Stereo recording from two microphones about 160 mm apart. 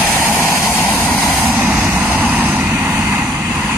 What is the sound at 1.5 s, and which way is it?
Vehicle, 5° right (ahead or behind).